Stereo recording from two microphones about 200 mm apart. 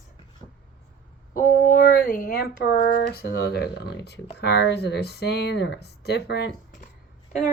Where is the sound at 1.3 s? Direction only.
45° left (ahead or behind).